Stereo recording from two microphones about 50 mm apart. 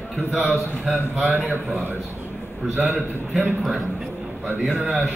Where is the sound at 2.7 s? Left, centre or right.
Right.